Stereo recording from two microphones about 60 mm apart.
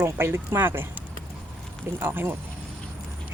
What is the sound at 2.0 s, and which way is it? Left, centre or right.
Speech, right.